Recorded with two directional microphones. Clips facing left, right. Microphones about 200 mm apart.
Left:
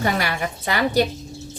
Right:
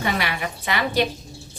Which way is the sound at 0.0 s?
40° left (ahead or behind).